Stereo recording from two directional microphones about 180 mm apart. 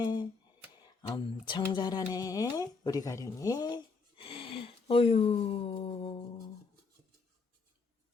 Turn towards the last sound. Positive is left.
turn(degrees=30)  # may be behind; listen again after turning